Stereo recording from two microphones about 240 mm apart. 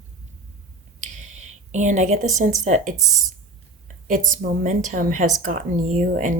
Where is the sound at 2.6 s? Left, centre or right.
Right.